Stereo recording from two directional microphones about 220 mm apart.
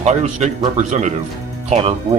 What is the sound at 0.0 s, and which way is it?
Speech, 30° right (ahead or behind).